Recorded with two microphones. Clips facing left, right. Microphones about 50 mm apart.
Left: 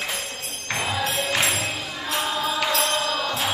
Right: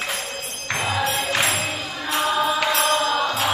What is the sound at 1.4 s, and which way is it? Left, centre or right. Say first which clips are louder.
Music: right 2 dB; right.